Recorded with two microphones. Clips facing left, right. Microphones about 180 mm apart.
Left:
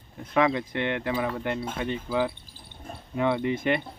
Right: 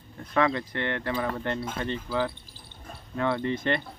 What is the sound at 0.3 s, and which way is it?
Speech, 15° left (ahead or behind).